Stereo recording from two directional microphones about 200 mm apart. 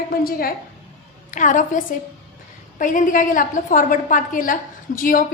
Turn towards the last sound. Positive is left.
turn(degrees=45)  # may be behind; listen again after turning